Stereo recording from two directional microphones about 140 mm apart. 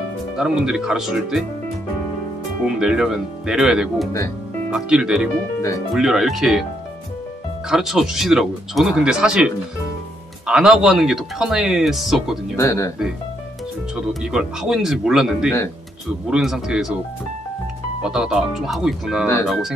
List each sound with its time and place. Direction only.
0.4 s speech: 5° right (ahead or behind)
2.6 s speech: 5° right (ahead or behind)
7.7 s speech: 5° right (ahead or behind)
12.5 s speech: 20° left (ahead or behind)
13.9 s speech: 5° right (ahead or behind)
18.0 s speech: 5° right (ahead or behind)